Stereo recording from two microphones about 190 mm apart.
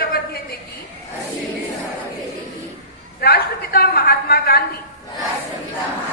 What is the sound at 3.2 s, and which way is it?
A woman's voice, 55° left (ahead or behind).